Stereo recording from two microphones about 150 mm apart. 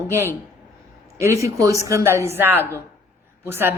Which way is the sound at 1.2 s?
20° right (ahead or behind).